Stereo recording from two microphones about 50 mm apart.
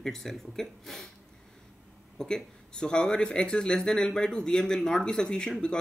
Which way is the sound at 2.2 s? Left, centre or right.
Centre.